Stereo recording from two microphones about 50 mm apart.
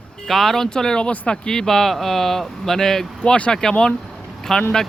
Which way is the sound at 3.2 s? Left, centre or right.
Centre.